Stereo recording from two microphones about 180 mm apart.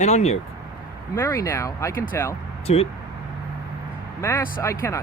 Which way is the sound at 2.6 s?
35° left (ahead or behind).